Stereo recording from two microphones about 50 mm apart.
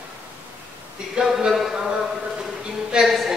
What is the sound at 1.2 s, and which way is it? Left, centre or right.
Speech, centre.